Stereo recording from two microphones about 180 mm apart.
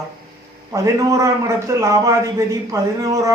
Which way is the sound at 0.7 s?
15° right (ahead or behind).